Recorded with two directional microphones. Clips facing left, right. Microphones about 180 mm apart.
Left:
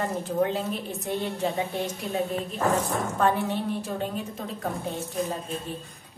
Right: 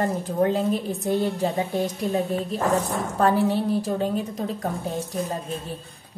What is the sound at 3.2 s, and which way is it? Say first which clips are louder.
Speech: right 5 dB; 35° right (ahead or behind).